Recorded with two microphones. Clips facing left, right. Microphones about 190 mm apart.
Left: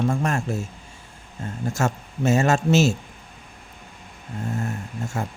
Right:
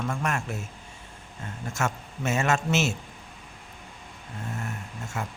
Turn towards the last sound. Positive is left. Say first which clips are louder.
# left 5 dB
turn(degrees=35)  # may be behind; listen again after turning